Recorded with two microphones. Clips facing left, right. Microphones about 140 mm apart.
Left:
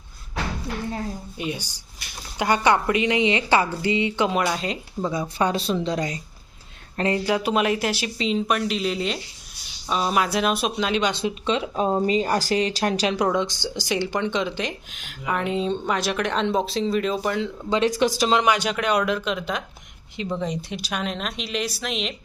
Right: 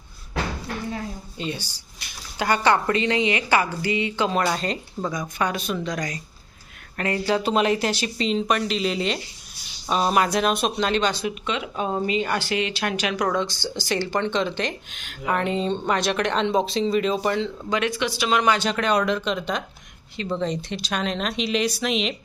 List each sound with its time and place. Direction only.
1.4 s a woman's voice: 15° left (ahead or behind)
4.4 s speech: 5° left (ahead or behind)
5.4 s a woman's voice: 30° left (ahead or behind)
7.3 s speech: 10° left (ahead or behind)
11.1 s a woman's voice: 25° left (ahead or behind)
13.2 s speech: 15° left (ahead or behind)
17.7 s speech: 35° left (ahead or behind)
18.4 s speech: 15° left (ahead or behind)